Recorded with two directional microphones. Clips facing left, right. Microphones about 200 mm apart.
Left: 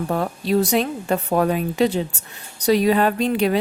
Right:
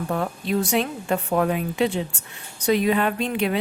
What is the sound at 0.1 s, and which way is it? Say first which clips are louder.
A woman's voice: left 4 dB; 35° left (ahead or behind).